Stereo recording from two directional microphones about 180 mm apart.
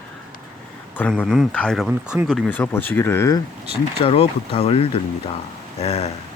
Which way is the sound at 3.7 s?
30° left (ahead or behind).